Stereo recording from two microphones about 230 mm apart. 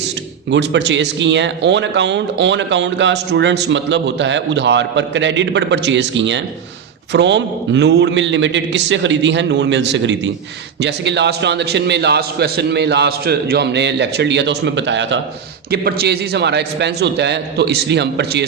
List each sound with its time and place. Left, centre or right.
0.5 s a man's voice: right